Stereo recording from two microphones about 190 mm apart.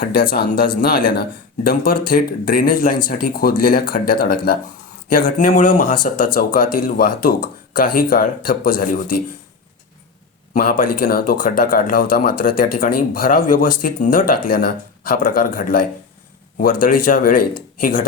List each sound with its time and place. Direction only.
0.0 s speech: 50° left (ahead or behind)
10.5 s speech: 45° left (ahead or behind)